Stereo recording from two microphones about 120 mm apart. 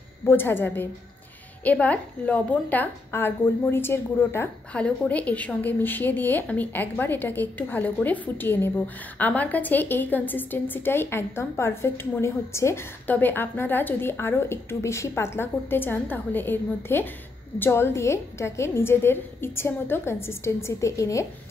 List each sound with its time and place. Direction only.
0.2 s a woman's voice: 20° left (ahead or behind)